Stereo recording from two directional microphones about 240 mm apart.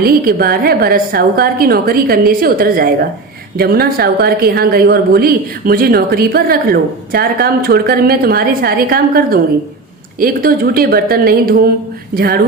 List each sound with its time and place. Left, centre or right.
0.0 s a woman's voice: right